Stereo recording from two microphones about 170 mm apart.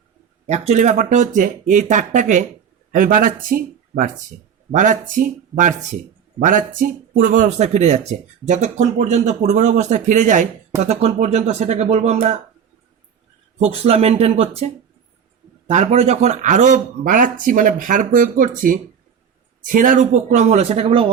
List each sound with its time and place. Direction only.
0.4 s speech: 40° right (ahead or behind)
13.6 s speech: 35° right (ahead or behind)
15.7 s speech: 40° right (ahead or behind)